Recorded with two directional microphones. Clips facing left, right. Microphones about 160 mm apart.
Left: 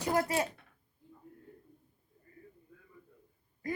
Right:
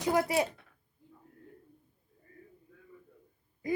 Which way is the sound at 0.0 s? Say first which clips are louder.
Right 2 dB; 15° right (ahead or behind).